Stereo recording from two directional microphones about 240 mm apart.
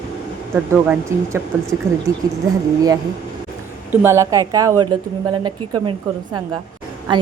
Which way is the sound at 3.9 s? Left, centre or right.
Centre.